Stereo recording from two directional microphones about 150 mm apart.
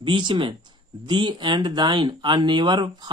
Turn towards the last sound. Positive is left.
turn(degrees=-30)  # may be behind; listen again after turning